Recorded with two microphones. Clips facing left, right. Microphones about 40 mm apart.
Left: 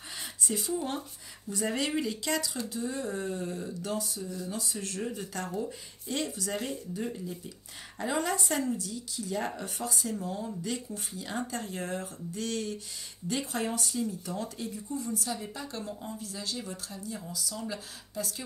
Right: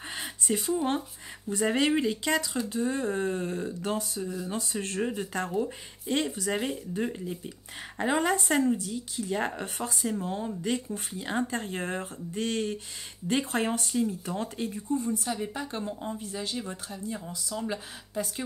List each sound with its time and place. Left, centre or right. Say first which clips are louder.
0.1 s a sound: right 4 dB; right
1.5 s speech: right 5 dB; right
2.7 s speech: right 6 dB; right